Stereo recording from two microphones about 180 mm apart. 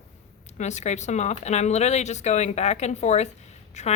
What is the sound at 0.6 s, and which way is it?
A woman's voice, 40° left (ahead or behind).